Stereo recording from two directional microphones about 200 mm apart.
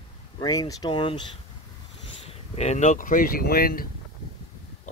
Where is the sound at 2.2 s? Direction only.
35° left (ahead or behind).